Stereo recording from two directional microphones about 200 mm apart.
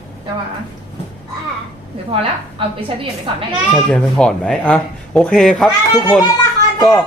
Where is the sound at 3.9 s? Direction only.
5° left (ahead or behind).